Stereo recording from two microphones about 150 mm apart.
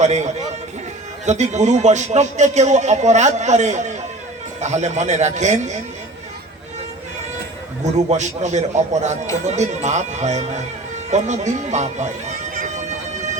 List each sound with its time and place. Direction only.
0.0 s a man's voice: 50° right (ahead or behind)
7.9 s a man's voice: 50° right (ahead or behind)
12.5 s bagpipes: 55° right (ahead or behind)